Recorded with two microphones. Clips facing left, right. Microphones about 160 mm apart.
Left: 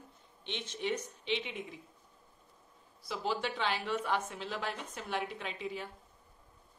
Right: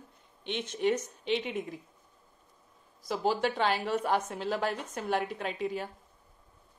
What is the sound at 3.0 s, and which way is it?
Speech, 40° right (ahead or behind).